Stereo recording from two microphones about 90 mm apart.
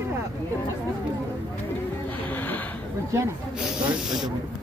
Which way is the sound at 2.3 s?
20° left (ahead or behind).